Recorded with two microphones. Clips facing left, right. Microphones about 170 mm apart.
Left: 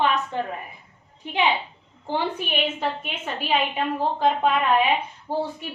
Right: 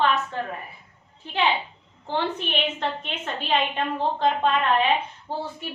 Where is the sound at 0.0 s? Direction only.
15° left (ahead or behind).